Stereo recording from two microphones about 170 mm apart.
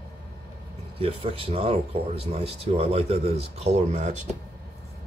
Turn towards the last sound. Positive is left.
turn(degrees=-40)  # may be behind; listen again after turning